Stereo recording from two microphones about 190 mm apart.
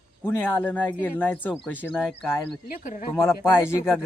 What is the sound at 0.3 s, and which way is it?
Speech, 10° left (ahead or behind).